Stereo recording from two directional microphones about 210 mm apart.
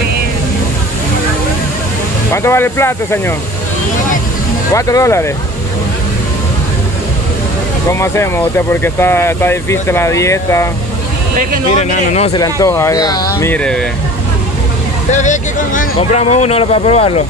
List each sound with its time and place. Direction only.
2.3 s speech: 10° left (ahead or behind)
4.7 s speech: 15° left (ahead or behind)
7.9 s speech: 10° left (ahead or behind)
11.7 s speech: 35° left (ahead or behind)
12.4 s speech: 15° left (ahead or behind)
15.0 s speech: 35° left (ahead or behind)